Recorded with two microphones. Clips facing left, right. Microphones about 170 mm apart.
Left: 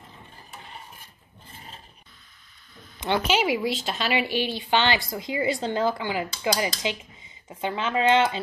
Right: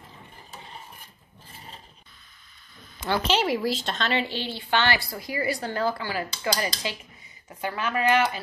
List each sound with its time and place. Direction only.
3.3 s a woman's voice: 5° left (ahead or behind); by 8.4 s 25° left (ahead or behind)